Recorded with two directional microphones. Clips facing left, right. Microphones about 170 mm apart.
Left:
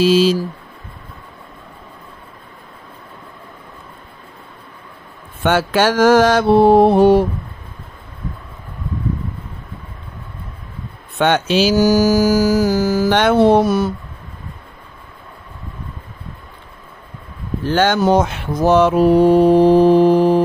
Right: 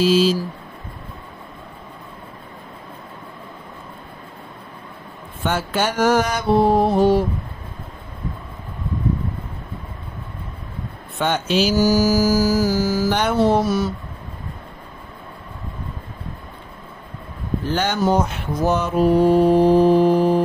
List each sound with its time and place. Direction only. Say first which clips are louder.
0.0 s speech: left 3 dB; 70° left (ahead or behind)
5.4 s mantra: left 6 dB; 85° left; by 7.2 s 65° left (ahead or behind)
11.1 s mantra: left 4 dB; 75° left (ahead or behind); by 13.9 s 55° left (ahead or behind)
17.6 s mantra: left 6 dB; 80° left